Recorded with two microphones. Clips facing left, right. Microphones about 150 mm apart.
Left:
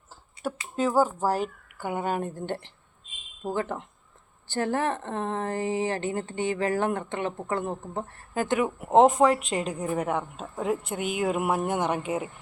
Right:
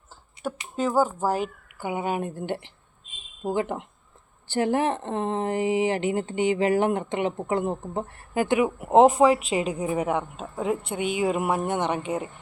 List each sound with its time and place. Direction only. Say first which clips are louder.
0.8 s a woman's voice: even; centre (ahead or behind)